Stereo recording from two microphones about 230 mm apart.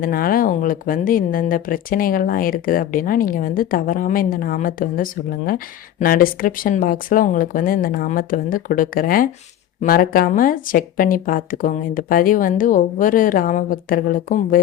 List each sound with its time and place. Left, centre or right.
0.0 s speech: left